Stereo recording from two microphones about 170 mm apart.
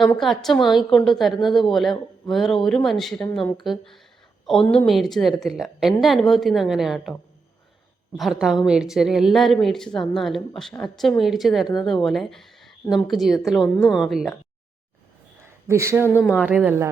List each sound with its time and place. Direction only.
0.0 s a woman's voice: centre (ahead or behind)
8.1 s a woman's voice: centre (ahead or behind)
15.6 s speech: 15° right (ahead or behind)
16.0 s speech: 15° left (ahead or behind)
16.4 s speech: 10° right (ahead or behind)